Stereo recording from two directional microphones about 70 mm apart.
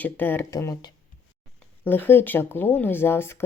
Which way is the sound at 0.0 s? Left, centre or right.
Left.